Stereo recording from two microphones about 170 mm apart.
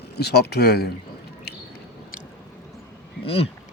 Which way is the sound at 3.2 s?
35° left (ahead or behind).